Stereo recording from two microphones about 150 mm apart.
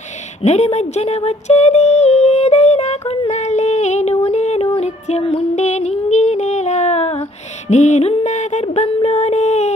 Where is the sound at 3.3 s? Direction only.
50° left (ahead or behind).